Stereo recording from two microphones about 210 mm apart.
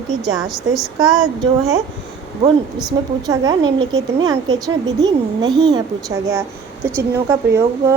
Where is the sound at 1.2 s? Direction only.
15° right (ahead or behind).